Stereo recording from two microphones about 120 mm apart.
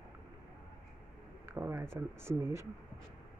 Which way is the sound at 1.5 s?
15° right (ahead or behind).